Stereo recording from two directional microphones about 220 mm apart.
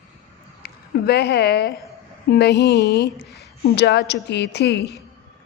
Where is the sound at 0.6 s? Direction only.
45° left (ahead or behind).